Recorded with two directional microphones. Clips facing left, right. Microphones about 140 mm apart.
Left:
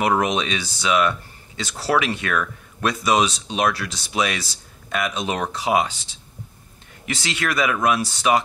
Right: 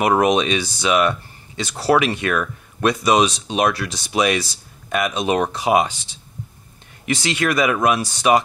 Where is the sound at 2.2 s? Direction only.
15° right (ahead or behind).